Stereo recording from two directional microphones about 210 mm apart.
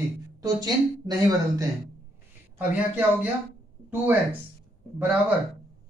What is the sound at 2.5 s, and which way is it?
Speech, 10° right (ahead or behind).